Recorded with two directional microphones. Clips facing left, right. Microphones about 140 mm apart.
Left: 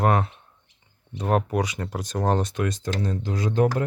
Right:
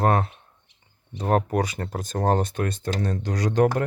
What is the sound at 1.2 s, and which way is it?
Speech, 40° right (ahead or behind).